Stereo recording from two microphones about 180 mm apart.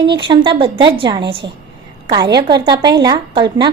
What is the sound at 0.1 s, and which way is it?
A woman's voice, 25° right (ahead or behind).